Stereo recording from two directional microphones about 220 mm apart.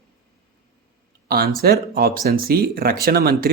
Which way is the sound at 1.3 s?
40° right (ahead or behind).